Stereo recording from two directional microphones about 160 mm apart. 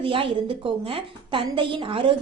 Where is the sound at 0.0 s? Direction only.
35° right (ahead or behind).